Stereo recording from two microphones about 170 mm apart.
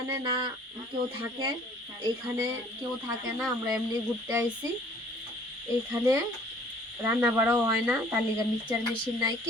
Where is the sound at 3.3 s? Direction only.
Centre (ahead or behind).